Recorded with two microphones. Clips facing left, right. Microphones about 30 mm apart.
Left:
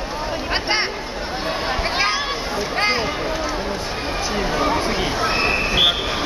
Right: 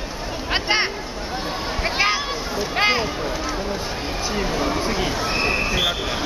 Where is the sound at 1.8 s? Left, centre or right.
Centre.